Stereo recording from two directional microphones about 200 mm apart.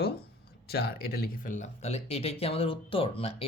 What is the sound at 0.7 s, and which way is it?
Speech, 50° left (ahead or behind).